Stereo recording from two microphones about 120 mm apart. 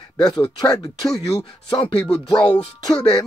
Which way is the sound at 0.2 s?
35° left (ahead or behind).